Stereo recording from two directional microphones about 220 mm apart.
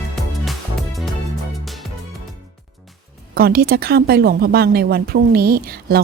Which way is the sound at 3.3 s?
45° right (ahead or behind).